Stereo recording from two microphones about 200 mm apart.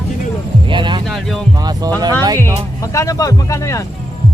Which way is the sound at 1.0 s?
Centre (ahead or behind).